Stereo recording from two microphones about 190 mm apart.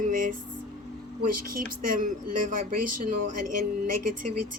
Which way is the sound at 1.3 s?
45° right (ahead or behind).